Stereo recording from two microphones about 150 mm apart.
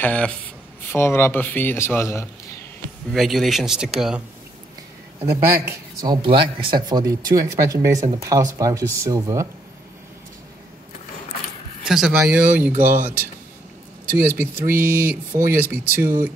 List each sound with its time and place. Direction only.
0.0 s speech: 10° left (ahead or behind)
3.1 s speech: centre (ahead or behind)
5.2 s speech: 15° right (ahead or behind)
6.2 s speech: 35° right (ahead or behind)
11.9 s speech: 5° right (ahead or behind)
12.7 s speech: 60° right (ahead or behind)
14.1 s speech: 15° right (ahead or behind)